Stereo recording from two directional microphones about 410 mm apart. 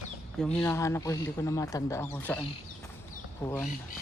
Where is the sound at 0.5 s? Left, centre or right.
Centre.